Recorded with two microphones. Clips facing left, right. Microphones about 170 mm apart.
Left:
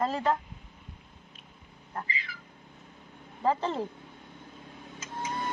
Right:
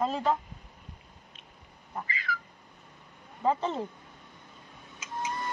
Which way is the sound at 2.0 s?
50° right (ahead or behind).